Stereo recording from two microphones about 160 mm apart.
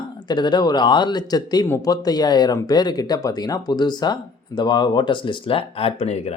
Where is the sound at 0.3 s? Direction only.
25° left (ahead or behind).